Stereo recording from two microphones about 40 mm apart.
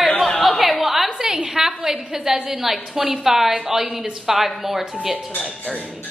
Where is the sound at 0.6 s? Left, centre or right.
Centre.